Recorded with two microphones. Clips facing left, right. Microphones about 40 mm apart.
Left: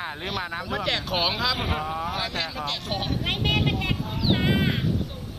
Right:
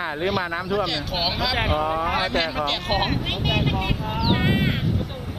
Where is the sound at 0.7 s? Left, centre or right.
Left.